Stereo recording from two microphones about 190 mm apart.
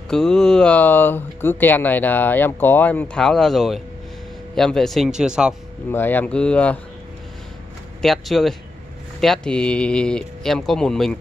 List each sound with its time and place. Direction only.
0.1 s speech: 5° left (ahead or behind)
5.9 s speech: 10° left (ahead or behind)
8.0 s speech: centre (ahead or behind)